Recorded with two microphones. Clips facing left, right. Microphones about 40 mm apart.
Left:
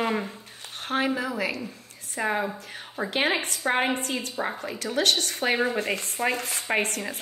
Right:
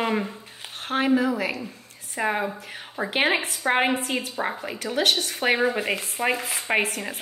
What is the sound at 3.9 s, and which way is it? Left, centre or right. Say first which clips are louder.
Speech: right 2 dB; centre.